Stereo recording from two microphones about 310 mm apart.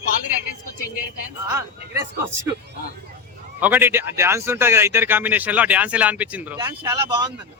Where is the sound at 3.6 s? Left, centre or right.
Centre.